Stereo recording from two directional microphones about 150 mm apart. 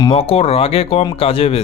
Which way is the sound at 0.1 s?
40° left (ahead or behind).